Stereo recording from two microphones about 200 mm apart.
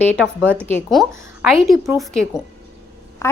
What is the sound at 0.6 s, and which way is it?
Speech, 10° left (ahead or behind).